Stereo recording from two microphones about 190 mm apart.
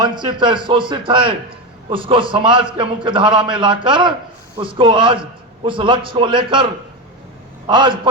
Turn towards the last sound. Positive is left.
turn(degrees=-25)  # may be behind; listen again after turning